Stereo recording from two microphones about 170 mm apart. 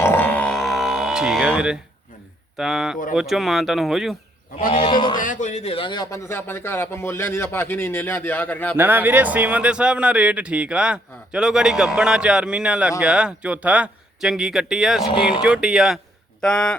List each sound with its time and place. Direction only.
0.0 s music: 10° left (ahead or behind); by 1.8 s 5° right (ahead or behind)
2.6 s a man's voice: centre (ahead or behind)
4.7 s a man's voice: 30° left (ahead or behind)
5.1 s a man's voice: 50° left (ahead or behind); by 8.7 s 10° left (ahead or behind)
8.7 s a man's voice: 10° right (ahead or behind)
15.1 s a man's voice: 30° left (ahead or behind)
15.4 s a man's voice: 5° right (ahead or behind)